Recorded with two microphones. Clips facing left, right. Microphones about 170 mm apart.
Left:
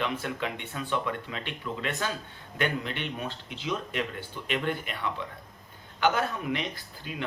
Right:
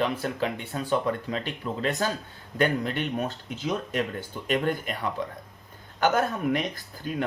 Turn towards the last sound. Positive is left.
turn(degrees=-45)  # may be behind; listen again after turning